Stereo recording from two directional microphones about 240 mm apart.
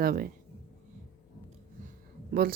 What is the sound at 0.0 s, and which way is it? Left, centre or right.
Speech, right.